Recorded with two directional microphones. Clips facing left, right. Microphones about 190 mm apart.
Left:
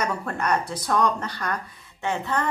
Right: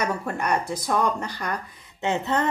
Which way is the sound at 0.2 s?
10° right (ahead or behind).